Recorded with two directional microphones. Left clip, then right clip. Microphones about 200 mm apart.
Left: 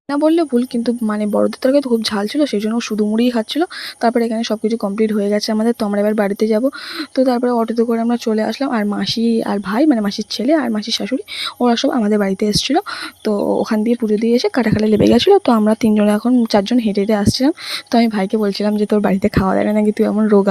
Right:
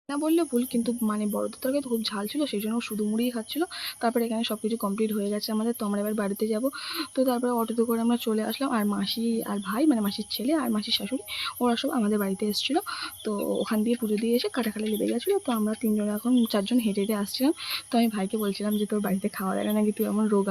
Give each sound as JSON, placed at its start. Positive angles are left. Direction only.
{"t": 0.1, "sound": "speech", "side_deg": 35}
{"t": 16.3, "sound": "speech", "side_deg": 30}